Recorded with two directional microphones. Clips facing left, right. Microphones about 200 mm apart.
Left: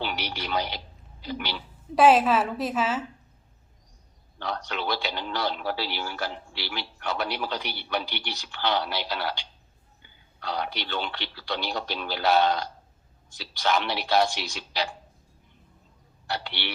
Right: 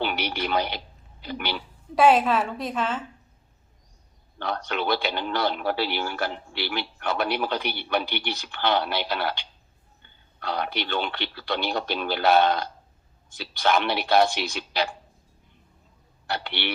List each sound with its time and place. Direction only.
0.0 s a sound: 55° right (ahead or behind)
1.2 s a man's voice: 55° right (ahead or behind)
2.0 s a woman's voice: centre (ahead or behind)
4.4 s a man's voice: 55° right (ahead or behind)
16.2 s a man's voice: 55° right (ahead or behind)